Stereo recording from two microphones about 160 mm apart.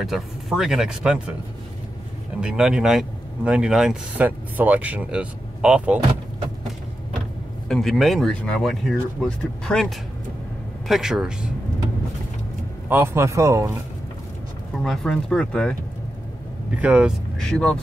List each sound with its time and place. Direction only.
0.0 s speech: centre (ahead or behind)
2.4 s speech: 5° right (ahead or behind)
7.6 s speech: centre (ahead or behind)
12.8 s speech: 15° right (ahead or behind)
14.8 s speech: 5° left (ahead or behind)
16.7 s speech: 5° right (ahead or behind)
17.4 s speech: 5° left (ahead or behind)